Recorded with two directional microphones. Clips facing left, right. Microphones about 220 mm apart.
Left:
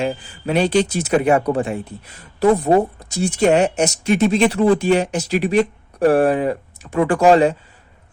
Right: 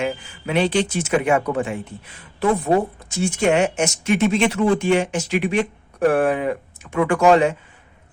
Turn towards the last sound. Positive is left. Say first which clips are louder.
# left 2 dB
turn(degrees=35)  # may be behind; listen again after turning